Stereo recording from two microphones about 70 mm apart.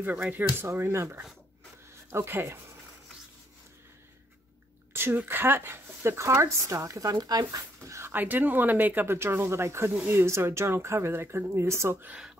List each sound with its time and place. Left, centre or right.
0.0 s speech: right
4.9 s speech: right
7.2 s speech: right
7.8 s speech: right
8.1 s speech: right
11.9 s speech: right